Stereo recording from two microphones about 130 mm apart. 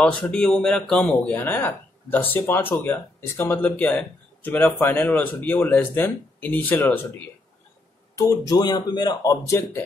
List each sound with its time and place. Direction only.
0.3 s speech: 5° left (ahead or behind)
8.2 s speech: 25° left (ahead or behind)